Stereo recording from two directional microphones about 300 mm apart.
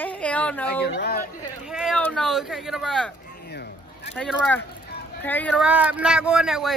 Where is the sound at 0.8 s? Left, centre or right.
Left.